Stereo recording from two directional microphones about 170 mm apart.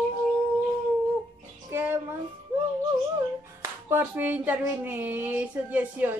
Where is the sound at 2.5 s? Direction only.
10° right (ahead or behind).